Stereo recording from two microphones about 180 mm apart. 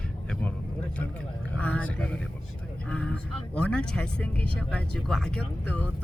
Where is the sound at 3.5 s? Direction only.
5° left (ahead or behind).